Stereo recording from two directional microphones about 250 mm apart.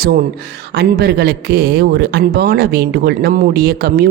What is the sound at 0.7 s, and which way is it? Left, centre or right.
Speech, right.